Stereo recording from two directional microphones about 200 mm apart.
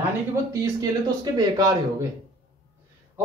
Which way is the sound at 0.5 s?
20° right (ahead or behind).